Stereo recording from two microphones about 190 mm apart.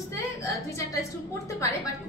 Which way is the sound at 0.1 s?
15° left (ahead or behind).